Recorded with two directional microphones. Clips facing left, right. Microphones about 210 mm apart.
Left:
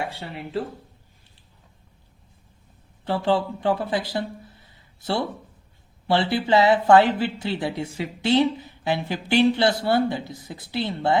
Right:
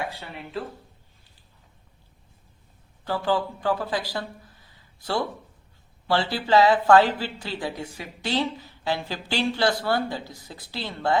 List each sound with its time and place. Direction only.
0.1 s speech: 30° left (ahead or behind)
3.0 s speech: 25° left (ahead or behind)
4.7 s a sound: 25° left (ahead or behind)
6.1 s speech: 20° left (ahead or behind)